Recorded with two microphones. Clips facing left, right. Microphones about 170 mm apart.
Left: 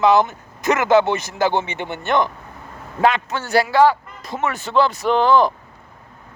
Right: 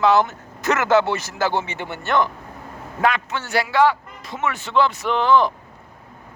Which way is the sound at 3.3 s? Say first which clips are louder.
Left 4 dB; 40° left (ahead or behind).